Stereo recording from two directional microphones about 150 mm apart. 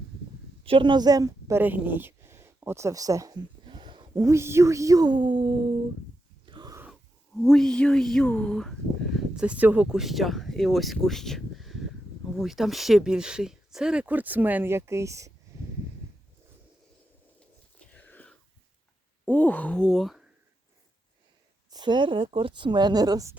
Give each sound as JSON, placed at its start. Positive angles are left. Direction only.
{"t": 0.6, "sound": "speech", "side_deg": -35}
{"t": 6.4, "sound": "wheeze", "side_deg": -30}
{"t": 7.4, "sound": "speech", "side_deg": 5}
{"t": 17.7, "sound": "biting", "side_deg": 10}
{"t": 19.3, "sound": "speech", "side_deg": 10}
{"t": 21.7, "sound": "speech", "side_deg": -30}